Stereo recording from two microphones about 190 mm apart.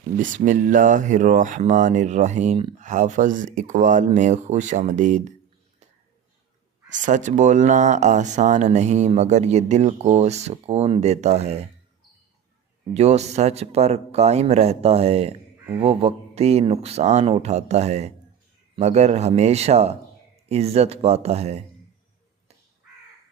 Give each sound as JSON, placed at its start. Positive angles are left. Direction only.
{"t": 0.2, "sound": "speech", "side_deg": -45}
{"t": 6.9, "sound": "speech", "side_deg": -40}
{"t": 12.9, "sound": "speech", "side_deg": -35}